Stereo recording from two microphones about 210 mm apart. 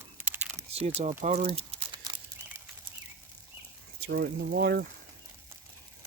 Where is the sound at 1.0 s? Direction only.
30° right (ahead or behind).